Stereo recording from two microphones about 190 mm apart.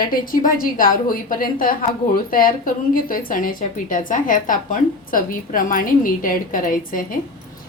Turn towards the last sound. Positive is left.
turn(degrees=45)  # may be behind; listen again after turning